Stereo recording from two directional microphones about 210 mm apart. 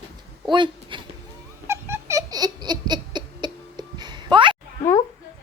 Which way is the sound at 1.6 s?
10° right (ahead or behind).